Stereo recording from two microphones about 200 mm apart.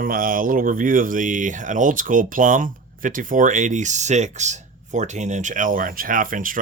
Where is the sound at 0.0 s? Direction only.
45° right (ahead or behind).